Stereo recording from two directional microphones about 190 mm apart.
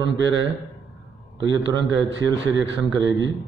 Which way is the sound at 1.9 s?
75° right (ahead or behind).